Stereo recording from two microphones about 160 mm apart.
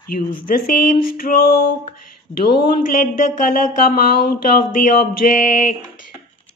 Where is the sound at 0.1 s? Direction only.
65° left (ahead or behind).